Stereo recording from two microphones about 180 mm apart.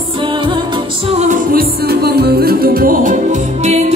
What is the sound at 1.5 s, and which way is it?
Music, 60° right (ahead or behind).